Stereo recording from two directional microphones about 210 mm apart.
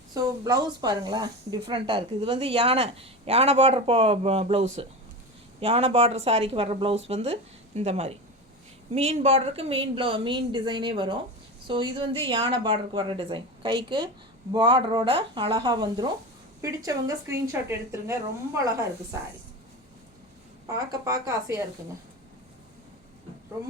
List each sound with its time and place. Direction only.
0.1 s a woman's voice: 20° right (ahead or behind)
20.7 s a woman's voice: 15° right (ahead or behind)